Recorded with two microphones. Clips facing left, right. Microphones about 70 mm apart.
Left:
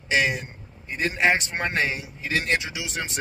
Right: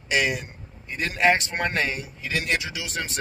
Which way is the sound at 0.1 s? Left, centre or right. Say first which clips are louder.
Left 1 dB; left.